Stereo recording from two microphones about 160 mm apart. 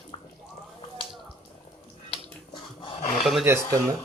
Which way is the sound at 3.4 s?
15° right (ahead or behind).